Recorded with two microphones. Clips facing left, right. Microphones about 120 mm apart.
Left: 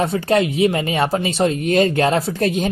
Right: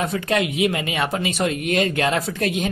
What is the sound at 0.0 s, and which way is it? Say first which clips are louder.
Speech: left 5 dB; 30° left (ahead or behind).